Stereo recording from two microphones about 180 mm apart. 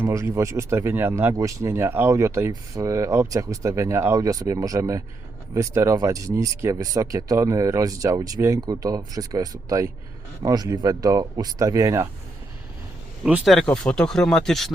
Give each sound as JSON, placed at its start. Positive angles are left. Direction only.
{"t": 0.0, "sound": "speech", "side_deg": -15}
{"t": 13.2, "sound": "speech", "side_deg": 0}